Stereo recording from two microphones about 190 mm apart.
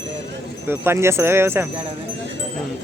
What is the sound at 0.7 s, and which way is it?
Speech, 15° right (ahead or behind).